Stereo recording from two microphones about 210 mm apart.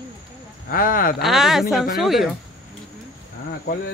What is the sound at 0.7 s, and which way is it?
Speech, 40° left (ahead or behind).